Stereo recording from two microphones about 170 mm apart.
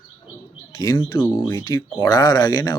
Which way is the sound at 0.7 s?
20° left (ahead or behind).